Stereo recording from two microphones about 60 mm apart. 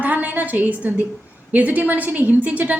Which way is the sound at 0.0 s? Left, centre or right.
Right.